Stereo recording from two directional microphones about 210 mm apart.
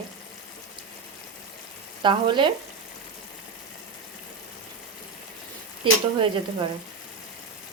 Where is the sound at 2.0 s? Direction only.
20° right (ahead or behind).